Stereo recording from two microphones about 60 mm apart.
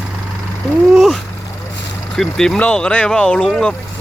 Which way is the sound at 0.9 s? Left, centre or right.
Centre.